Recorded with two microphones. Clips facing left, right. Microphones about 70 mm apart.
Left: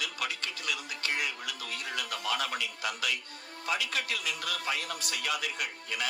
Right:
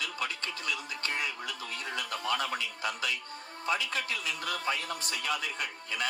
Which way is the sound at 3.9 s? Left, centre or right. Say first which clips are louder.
Even; centre.